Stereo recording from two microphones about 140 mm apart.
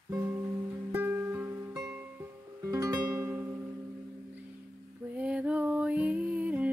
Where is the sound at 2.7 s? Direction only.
20° right (ahead or behind).